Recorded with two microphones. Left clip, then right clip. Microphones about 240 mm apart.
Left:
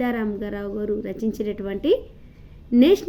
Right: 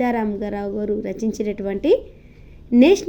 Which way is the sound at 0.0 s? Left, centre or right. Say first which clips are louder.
Right 4 dB; centre.